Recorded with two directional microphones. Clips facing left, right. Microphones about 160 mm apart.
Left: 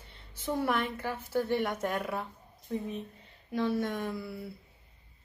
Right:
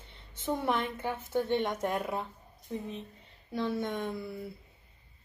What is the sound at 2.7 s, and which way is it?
Speech, 10° left (ahead or behind).